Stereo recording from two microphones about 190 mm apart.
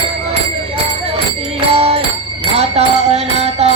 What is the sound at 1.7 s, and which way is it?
Music, 30° right (ahead or behind).